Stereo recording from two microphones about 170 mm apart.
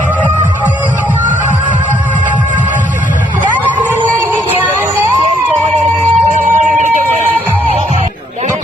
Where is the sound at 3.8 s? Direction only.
15° right (ahead or behind).